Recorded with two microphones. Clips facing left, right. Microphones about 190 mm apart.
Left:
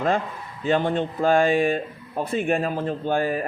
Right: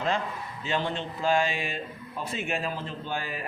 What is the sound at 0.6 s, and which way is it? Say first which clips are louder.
Speech: left 9 dB; 50° left (ahead or behind).